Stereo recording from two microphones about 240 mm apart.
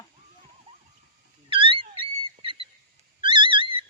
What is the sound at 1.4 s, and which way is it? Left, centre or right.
Dog, right.